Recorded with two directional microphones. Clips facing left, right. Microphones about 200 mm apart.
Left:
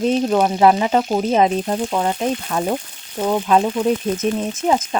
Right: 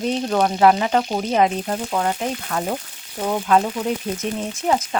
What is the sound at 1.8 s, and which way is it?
Frying, 10° left (ahead or behind).